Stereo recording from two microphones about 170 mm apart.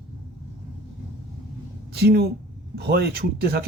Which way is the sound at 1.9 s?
70° right (ahead or behind).